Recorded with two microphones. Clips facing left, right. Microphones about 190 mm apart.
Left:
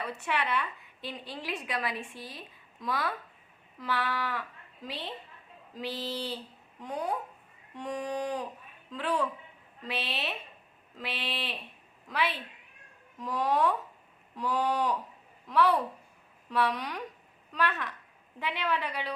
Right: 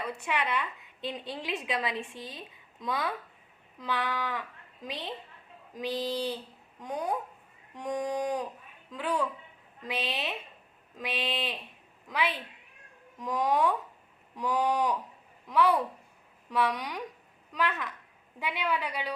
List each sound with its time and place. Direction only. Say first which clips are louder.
0.1 s a woman's voice: even; 15° right (ahead or behind)